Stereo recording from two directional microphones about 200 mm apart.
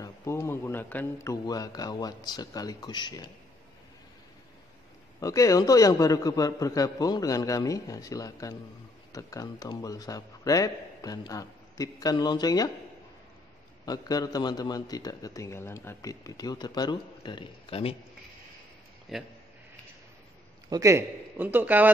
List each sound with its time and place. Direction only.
0.0 s a man's voice: 15° left (ahead or behind)
5.2 s a man's voice: 15° left (ahead or behind)
13.8 s a man's voice: 20° left (ahead or behind)
19.1 s a man's voice: centre (ahead or behind)
20.7 s a man's voice: 15° right (ahead or behind)